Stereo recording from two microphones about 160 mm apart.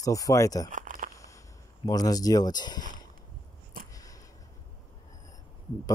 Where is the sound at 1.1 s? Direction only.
20° left (ahead or behind).